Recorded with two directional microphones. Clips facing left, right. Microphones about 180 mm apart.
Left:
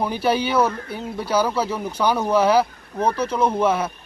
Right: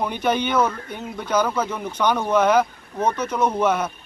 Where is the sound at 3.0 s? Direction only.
30° left (ahead or behind).